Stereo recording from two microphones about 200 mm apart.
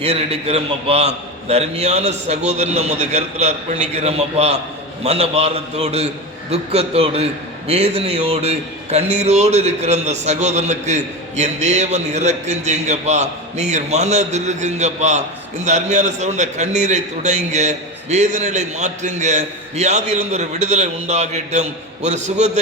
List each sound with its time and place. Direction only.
0.0 s a man's voice: 30° right (ahead or behind)